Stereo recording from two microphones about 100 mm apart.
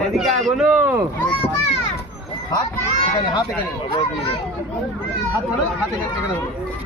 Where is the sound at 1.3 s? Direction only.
70° left (ahead or behind).